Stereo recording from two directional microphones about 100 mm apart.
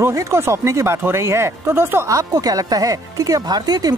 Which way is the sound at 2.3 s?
40° right (ahead or behind).